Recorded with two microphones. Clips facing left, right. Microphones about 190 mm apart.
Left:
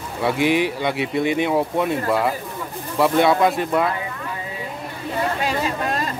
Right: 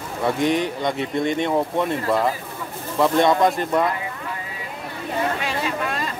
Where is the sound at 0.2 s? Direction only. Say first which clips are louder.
Left 2 dB; 5° left (ahead or behind).